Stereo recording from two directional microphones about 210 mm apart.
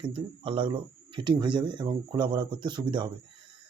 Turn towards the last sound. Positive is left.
turn(degrees=-20)  # may be behind; listen again after turning